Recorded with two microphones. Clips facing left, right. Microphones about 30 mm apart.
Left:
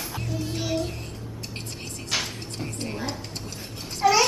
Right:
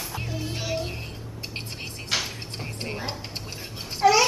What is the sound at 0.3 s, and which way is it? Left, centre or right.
Music, centre.